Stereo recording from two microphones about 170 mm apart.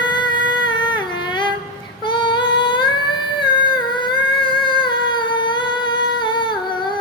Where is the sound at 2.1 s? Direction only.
30° left (ahead or behind).